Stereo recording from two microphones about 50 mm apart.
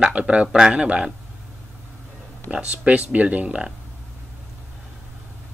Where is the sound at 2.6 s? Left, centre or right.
Right.